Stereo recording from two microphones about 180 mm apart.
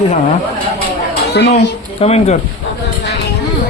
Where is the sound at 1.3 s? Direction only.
65° left (ahead or behind).